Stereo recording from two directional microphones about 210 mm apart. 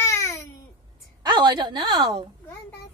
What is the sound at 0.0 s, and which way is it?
Babbling, 15° left (ahead or behind).